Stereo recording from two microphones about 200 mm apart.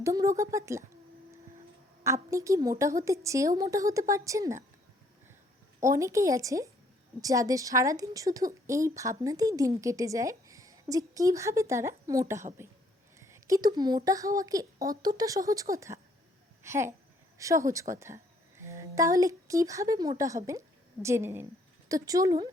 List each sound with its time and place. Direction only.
0.0 s a woman's voice: 15° right (ahead or behind)
2.0 s a woman's voice: 15° right (ahead or behind)
5.8 s a woman's voice: 15° right (ahead or behind)
13.1 s a sound: 15° right (ahead or behind)
13.7 s a woman's voice: 20° right (ahead or behind)